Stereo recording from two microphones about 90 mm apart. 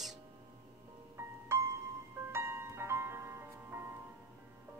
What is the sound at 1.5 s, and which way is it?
Music, 30° right (ahead or behind).